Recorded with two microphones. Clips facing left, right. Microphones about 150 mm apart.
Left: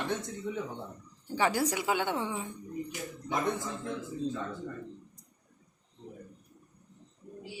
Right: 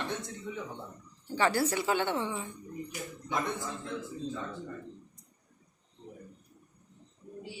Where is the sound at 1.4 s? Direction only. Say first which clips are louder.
Right 1 dB; 15° left (ahead or behind).